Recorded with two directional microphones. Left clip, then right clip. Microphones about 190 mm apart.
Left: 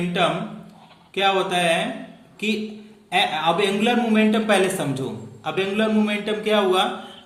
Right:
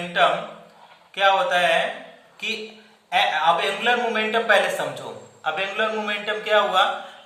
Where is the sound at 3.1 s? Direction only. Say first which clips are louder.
Right 1 dB; 45° left (ahead or behind).